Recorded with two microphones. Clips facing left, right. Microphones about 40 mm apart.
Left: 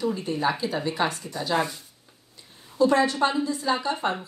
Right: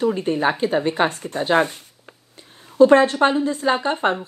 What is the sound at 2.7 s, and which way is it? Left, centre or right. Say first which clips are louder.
Speech: right 8 dB; right.